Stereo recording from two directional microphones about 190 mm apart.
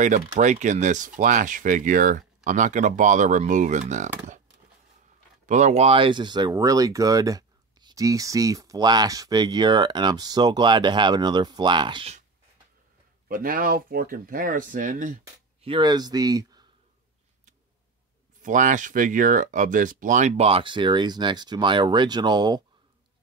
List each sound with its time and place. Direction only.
0.0 s speech: 40° right (ahead or behind)
5.5 s speech: 40° right (ahead or behind)
13.3 s speech: 50° right (ahead or behind)
15.6 s speech: 25° right (ahead or behind)
18.4 s speech: 40° right (ahead or behind); by 22.6 s 20° right (ahead or behind)